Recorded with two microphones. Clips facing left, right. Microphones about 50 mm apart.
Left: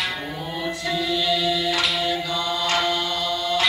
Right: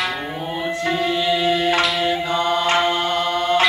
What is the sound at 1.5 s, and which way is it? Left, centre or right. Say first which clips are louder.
Music: right 5 dB; right.